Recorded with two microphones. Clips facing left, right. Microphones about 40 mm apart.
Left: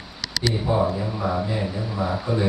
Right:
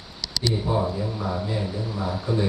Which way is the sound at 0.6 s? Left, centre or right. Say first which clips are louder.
Left 3 dB; left.